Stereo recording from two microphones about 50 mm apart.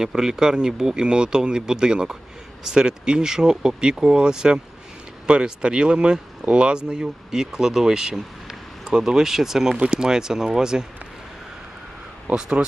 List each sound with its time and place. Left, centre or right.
0.0 s speech: centre
8.1 s a sound: centre
8.9 s speech: centre
9.7 s speech: centre
12.3 s speech: centre